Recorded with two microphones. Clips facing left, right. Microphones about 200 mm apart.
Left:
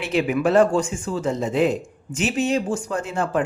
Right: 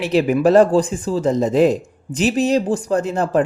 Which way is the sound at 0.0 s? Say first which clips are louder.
Right 5 dB; 35° right (ahead or behind).